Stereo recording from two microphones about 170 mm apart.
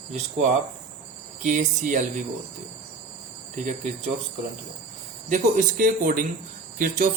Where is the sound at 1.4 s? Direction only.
45° right (ahead or behind).